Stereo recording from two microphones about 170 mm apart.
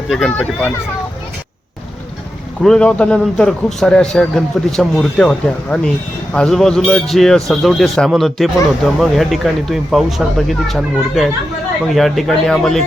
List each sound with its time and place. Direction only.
0.1 s a man's voice: 5° left (ahead or behind)
2.6 s a man's voice: 5° left (ahead or behind)